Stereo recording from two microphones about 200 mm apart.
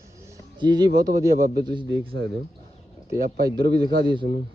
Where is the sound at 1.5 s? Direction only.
55° right (ahead or behind).